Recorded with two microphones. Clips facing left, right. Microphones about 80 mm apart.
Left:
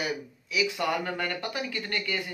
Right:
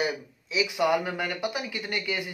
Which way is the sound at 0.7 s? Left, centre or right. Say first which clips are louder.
Right 4 dB; centre.